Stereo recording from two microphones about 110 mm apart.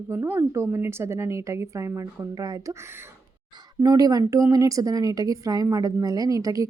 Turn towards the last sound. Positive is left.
turn(degrees=-35)  # may be behind; listen again after turning